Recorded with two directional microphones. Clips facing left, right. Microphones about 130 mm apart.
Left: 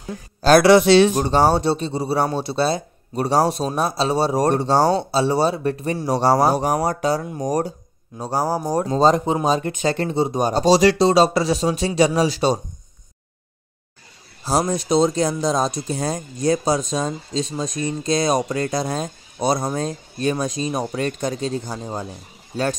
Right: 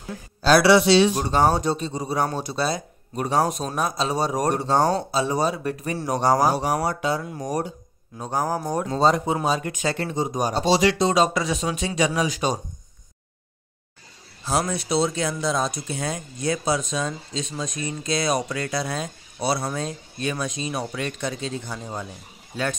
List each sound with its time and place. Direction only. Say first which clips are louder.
0.4 s a man's voice: left 4 dB; 45° left (ahead or behind)
1.2 s speech: left 3 dB; 30° left (ahead or behind)
6.5 s speech: left 3 dB; 45° left (ahead or behind)
10.6 s speech: left 5 dB; 40° left (ahead or behind)
14.4 s speech: left 4 dB; 35° left (ahead or behind)